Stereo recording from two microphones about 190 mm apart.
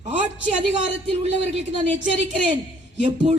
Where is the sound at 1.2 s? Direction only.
35° right (ahead or behind).